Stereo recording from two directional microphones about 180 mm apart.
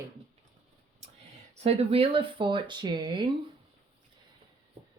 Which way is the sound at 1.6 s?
35° right (ahead or behind).